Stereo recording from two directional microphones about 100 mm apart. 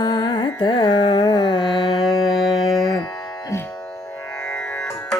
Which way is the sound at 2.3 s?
Centre (ahead or behind).